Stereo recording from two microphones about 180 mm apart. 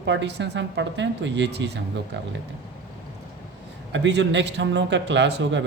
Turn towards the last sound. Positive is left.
turn(degrees=-80)